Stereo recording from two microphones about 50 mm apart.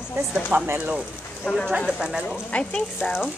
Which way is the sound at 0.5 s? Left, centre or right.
Right.